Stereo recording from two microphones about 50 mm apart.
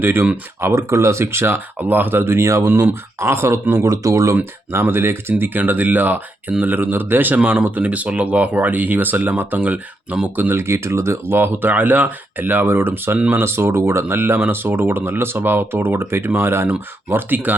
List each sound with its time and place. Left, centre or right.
0.0 s speech: right
0.6 s speech: right
1.8 s speech: right
4.7 s speech: right
5.4 s speech: right
10.5 s speech: right
11.7 s speech: right
13.4 s speech: right